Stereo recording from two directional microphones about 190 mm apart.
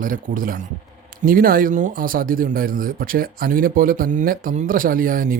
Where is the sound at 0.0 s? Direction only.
45° right (ahead or behind).